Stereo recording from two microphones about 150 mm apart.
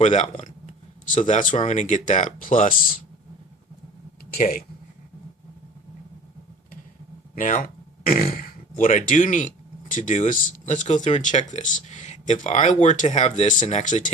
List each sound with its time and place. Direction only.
0.0 s speech: 50° left (ahead or behind)
4.3 s speech: 80° left
7.3 s speech: 65° left (ahead or behind)